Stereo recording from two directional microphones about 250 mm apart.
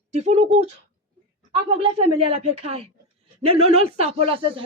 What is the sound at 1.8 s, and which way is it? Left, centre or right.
A woman's voice, right.